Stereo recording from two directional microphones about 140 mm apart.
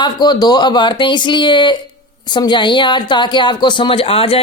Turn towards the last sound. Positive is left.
turn(degrees=40)  # may be behind; listen again after turning